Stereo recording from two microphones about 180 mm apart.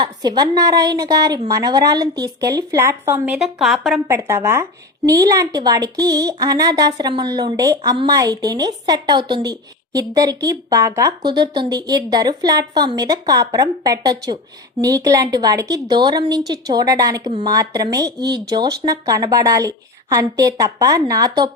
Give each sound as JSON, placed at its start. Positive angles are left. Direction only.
{"t": 0.0, "sound": "a woman's voice", "side_deg": -20}
{"t": 3.3, "sound": "a woman's voice", "side_deg": 0}
{"t": 4.1, "sound": "a woman's voice", "side_deg": -15}